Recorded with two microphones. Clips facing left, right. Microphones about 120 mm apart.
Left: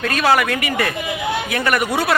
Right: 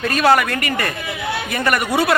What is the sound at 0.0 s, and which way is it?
A man's voice, centre (ahead or behind).